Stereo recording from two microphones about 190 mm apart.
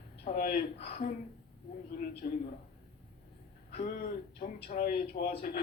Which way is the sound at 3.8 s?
50° left (ahead or behind).